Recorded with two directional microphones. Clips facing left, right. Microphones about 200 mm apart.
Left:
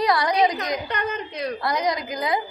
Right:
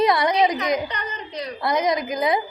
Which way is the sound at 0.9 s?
55° left (ahead or behind).